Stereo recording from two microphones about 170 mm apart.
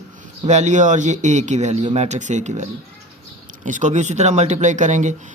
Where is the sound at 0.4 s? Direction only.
45° right (ahead or behind).